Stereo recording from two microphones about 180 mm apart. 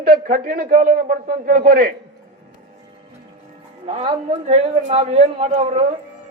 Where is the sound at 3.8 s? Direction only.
30° right (ahead or behind).